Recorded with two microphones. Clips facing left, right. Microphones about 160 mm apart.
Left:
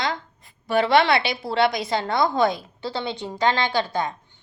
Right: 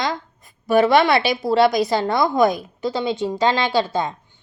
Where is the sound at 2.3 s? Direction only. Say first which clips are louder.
Right 6 dB; 25° left (ahead or behind).